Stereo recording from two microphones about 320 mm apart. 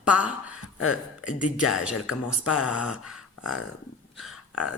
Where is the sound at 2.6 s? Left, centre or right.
Centre.